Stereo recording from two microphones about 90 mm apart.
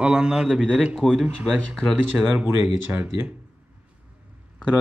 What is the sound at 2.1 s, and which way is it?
Speech, 10° right (ahead or behind).